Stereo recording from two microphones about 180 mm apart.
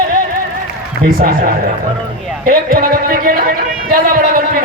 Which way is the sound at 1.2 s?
55° right (ahead or behind).